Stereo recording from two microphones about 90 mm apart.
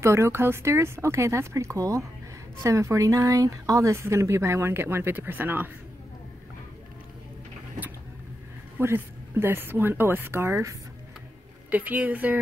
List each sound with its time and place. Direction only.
0.0 s speech: 30° right (ahead or behind)
8.7 s speech: 25° right (ahead or behind)
11.7 s a woman's voice: 20° right (ahead or behind)